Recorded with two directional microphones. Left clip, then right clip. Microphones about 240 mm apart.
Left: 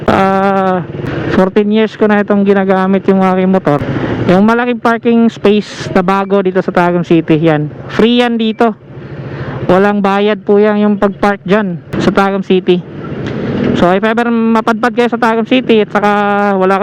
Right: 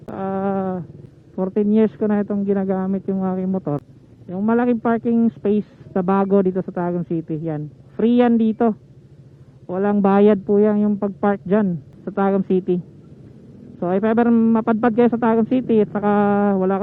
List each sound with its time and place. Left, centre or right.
0.1 s a sound: centre
1.3 s speech: centre
9.7 s speech: centre